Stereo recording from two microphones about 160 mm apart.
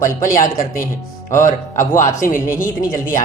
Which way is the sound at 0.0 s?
60° left (ahead or behind).